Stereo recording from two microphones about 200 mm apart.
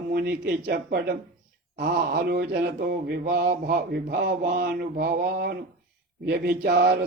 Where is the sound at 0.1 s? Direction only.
50° right (ahead or behind).